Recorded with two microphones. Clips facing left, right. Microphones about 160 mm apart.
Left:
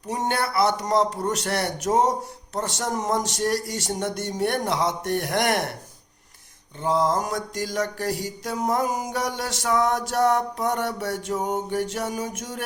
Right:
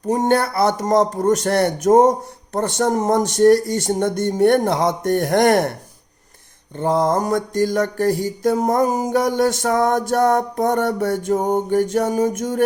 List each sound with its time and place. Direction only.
0.1 s speech: 50° right (ahead or behind)
6.7 s speech: 55° right (ahead or behind)